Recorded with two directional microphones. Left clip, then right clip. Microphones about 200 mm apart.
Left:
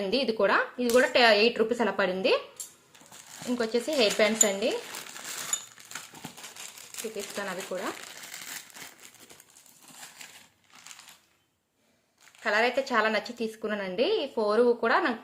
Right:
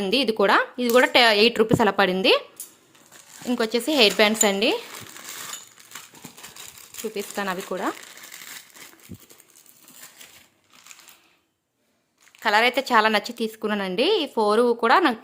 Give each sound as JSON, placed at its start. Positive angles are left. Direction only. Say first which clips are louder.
{"t": 0.0, "sound": "a woman's voice", "louder": "right 5 dB", "side_deg": -35}
{"t": 3.5, "sound": "a woman's voice", "louder": "right 5 dB", "side_deg": -35}
{"t": 7.3, "sound": "a woman's voice", "louder": "right 7 dB", "side_deg": -40}
{"t": 12.4, "sound": "a woman's voice", "louder": "right 6 dB", "side_deg": -40}